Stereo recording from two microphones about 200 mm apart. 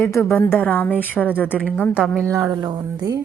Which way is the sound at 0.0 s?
15° left (ahead or behind).